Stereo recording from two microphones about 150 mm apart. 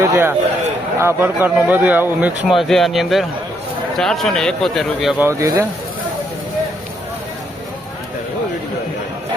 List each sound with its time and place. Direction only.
0.0 s a man's voice: 15° right (ahead or behind)
5.2 s speech: 20° right (ahead or behind)